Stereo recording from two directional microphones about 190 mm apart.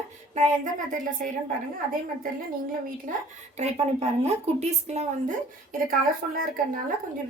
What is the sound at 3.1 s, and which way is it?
A woman's voice, 40° right (ahead or behind).